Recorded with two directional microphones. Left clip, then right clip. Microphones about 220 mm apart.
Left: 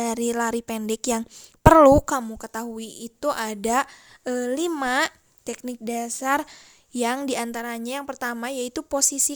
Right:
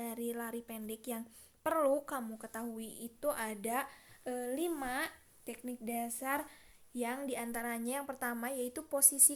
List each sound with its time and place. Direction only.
0.0 s a woman's voice: 50° left (ahead or behind)